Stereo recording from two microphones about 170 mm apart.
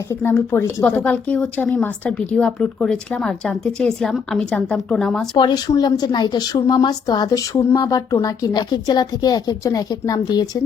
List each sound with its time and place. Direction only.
0.1 s a woman's voice: 15° left (ahead or behind)
5.4 s speech: 25° left (ahead or behind)